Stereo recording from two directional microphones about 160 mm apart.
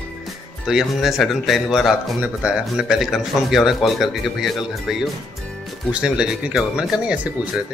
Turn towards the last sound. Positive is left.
turn(degrees=-5)  # may be behind; listen again after turning